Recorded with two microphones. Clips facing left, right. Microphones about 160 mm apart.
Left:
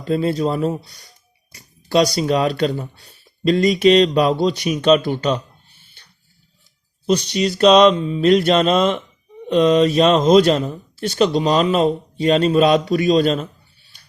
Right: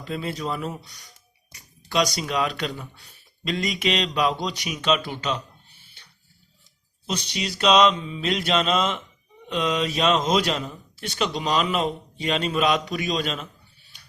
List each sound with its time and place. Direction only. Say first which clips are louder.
0.0 s speech: left 11 dB; 35° left (ahead or behind)
7.1 s mantra: left 11 dB; 40° left (ahead or behind)
9.5 s speech: left 11 dB; 40° left (ahead or behind)